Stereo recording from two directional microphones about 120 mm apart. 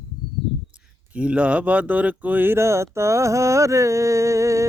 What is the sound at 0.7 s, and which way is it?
Speech, 10° right (ahead or behind).